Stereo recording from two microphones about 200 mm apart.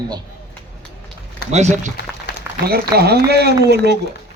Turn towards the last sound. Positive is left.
turn(degrees=-55)  # may be behind; listen again after turning